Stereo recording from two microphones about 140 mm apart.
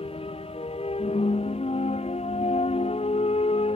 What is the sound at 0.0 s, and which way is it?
Music, 45° left (ahead or behind).